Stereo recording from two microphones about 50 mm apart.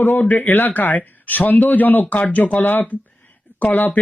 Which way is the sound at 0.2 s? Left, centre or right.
Left.